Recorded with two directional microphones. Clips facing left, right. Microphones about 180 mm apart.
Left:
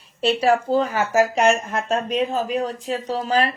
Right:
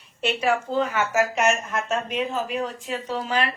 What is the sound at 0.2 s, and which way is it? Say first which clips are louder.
Speech: left 5 dB; 35° left (ahead or behind).